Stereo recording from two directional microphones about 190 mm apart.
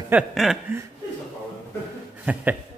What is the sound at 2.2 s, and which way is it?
Speech, 5° right (ahead or behind).